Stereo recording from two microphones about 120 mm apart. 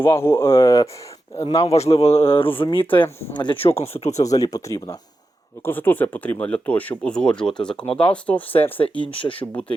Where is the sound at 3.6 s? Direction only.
60° left (ahead or behind).